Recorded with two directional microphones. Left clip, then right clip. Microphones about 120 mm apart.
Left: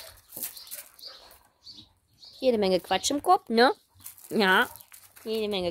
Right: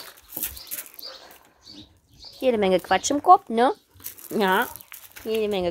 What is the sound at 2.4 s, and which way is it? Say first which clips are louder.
Speech: right 3 dB; 45° left (ahead or behind).